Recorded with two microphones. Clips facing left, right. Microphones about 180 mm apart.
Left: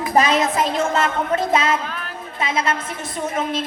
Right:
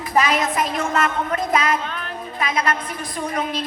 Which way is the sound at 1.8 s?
5° left (ahead or behind).